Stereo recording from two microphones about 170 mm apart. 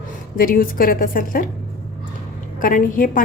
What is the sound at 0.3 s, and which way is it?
A woman's voice, 55° left (ahead or behind).